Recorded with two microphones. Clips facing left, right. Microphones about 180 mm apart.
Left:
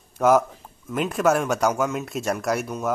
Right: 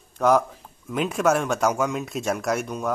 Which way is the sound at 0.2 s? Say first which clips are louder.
Left 1 dB; 5° left (ahead or behind).